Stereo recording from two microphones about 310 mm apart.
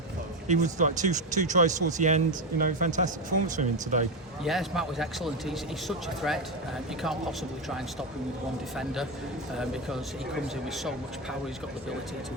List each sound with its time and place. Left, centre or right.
0.4 s speech: right
4.4 s a man's voice: centre
8.7 s a man's voice: centre
10.7 s a man's voice: centre